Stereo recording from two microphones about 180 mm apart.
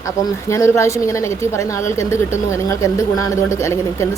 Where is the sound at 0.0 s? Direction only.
15° left (ahead or behind).